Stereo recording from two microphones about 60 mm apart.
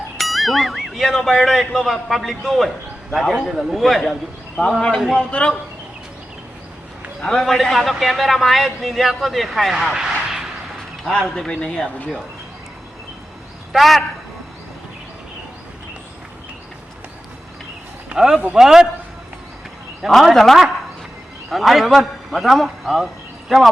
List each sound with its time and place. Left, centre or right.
0.2 s a man's voice: centre
5.1 s a man's voice: centre
7.2 s a man's voice: centre
11.0 s a man's voice: centre
13.7 s a man's voice: centre
18.1 s a man's voice: centre
20.1 s a man's voice: centre